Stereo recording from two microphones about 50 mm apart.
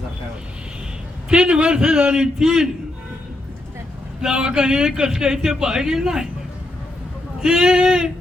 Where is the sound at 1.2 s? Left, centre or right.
Centre.